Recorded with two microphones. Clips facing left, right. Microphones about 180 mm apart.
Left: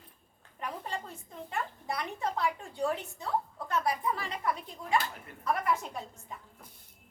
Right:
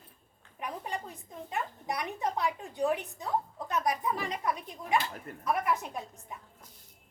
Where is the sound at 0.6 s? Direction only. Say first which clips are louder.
Right 1 dB; 15° right (ahead or behind).